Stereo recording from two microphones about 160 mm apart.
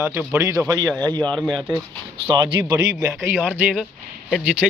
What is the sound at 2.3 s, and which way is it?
Speech, 30° right (ahead or behind).